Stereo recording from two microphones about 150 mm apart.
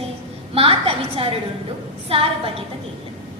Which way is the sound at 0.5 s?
40° right (ahead or behind).